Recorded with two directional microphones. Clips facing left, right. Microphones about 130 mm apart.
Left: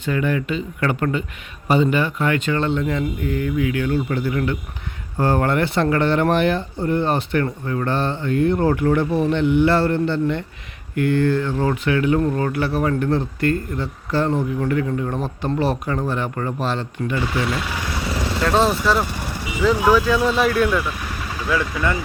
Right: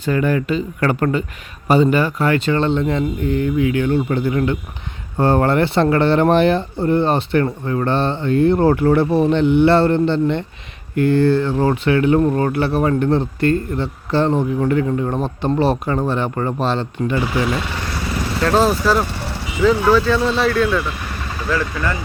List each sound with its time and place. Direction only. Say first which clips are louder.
0.0 s speech: right 3 dB; 40° right (ahead or behind)
17.4 s speech: right 3 dB; centre (ahead or behind)
19.2 s speech: right 3 dB; 10° left (ahead or behind)